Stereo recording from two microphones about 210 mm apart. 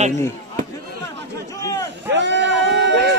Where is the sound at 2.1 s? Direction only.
55° right (ahead or behind).